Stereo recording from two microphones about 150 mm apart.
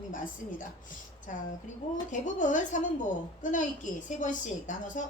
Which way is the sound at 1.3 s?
60° left (ahead or behind).